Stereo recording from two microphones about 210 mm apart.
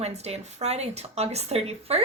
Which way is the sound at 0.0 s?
30° right (ahead or behind).